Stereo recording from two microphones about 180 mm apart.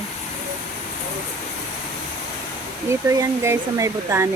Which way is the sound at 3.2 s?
15° right (ahead or behind).